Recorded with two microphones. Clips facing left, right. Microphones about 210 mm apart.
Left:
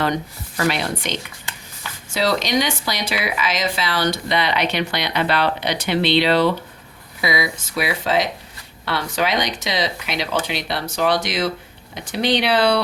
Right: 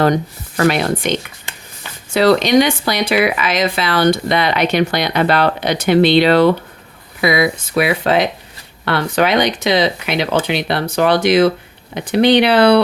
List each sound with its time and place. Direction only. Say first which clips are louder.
0.6 s speech: right 7 dB; 50° right (ahead or behind)